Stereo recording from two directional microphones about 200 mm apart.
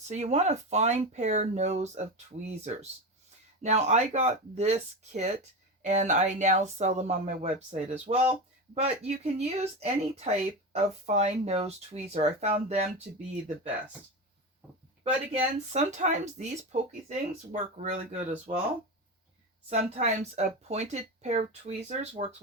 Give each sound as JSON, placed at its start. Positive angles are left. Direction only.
{"t": 0.1, "sound": "speech", "side_deg": -35}
{"t": 3.6, "sound": "speech", "side_deg": -35}
{"t": 15.0, "sound": "speech", "side_deg": -35}
{"t": 19.7, "sound": "speech", "side_deg": -35}